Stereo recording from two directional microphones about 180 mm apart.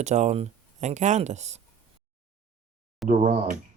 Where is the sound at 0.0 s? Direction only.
40° right (ahead or behind).